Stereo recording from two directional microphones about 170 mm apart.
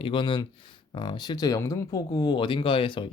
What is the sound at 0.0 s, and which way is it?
Speech, 30° left (ahead or behind).